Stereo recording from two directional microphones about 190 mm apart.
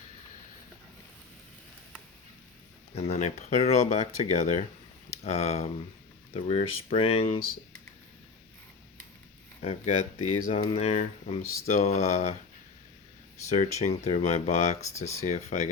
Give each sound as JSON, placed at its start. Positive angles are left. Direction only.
{"t": 2.9, "sound": "speech", "side_deg": 35}
{"t": 9.6, "sound": "speech", "side_deg": 35}
{"t": 13.5, "sound": "speech", "side_deg": 35}